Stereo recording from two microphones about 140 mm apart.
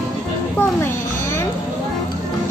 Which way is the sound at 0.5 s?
20° left (ahead or behind).